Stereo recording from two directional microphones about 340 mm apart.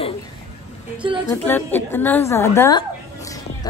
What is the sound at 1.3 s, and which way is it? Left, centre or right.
A woman's voice, centre.